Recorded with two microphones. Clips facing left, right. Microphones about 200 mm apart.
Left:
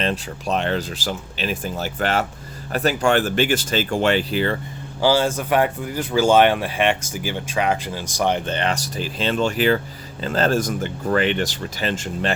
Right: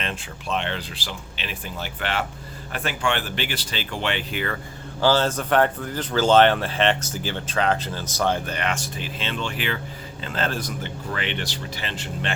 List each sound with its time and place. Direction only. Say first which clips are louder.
0.0 s speech: left 8 dB; 40° left (ahead or behind)
4.9 s speech: left 2 dB; 10° left (ahead or behind)
8.5 s speech: left 4 dB; 35° left (ahead or behind)